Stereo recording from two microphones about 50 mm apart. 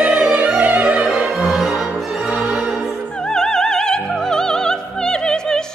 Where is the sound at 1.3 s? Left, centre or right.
Centre.